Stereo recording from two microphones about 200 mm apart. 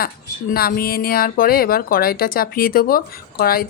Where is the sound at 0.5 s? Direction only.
50° left (ahead or behind).